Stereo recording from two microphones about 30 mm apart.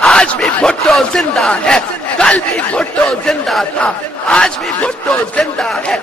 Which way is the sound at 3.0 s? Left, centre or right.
Left.